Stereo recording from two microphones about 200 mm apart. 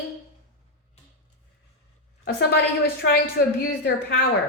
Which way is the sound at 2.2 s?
50° left (ahead or behind).